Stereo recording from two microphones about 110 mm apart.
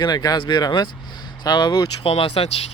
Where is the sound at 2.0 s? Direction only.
60° left (ahead or behind).